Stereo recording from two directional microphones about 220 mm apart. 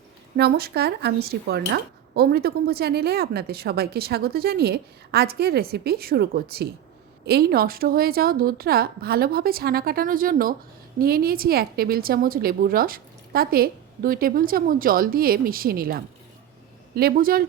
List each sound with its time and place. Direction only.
0.3 s a woman's voice: 45° right (ahead or behind)